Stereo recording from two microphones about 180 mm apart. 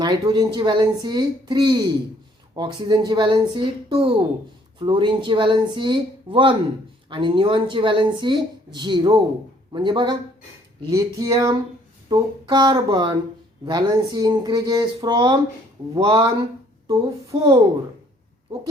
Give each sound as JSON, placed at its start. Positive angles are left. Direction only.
{"t": 0.0, "sound": "a woman's voice", "side_deg": -25}
{"t": 17.3, "sound": "a woman's voice", "side_deg": -25}